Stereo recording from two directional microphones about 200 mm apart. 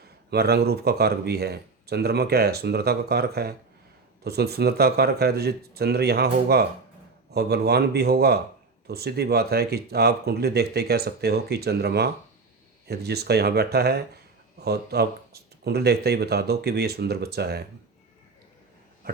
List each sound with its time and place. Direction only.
0.3 s speech: 55° right (ahead or behind)